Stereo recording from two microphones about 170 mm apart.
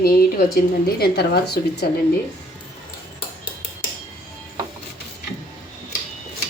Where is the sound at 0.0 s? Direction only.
60° left (ahead or behind).